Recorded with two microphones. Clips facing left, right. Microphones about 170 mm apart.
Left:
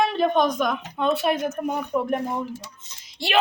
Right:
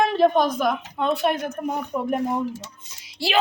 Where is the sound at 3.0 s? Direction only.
Centre (ahead or behind).